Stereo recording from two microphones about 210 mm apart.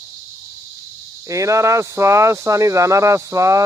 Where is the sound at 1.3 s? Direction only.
15° right (ahead or behind).